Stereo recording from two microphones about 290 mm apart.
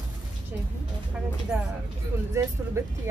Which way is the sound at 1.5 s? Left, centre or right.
Centre.